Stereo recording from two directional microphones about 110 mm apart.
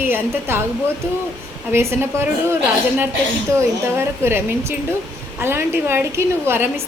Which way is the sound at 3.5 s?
20° right (ahead or behind).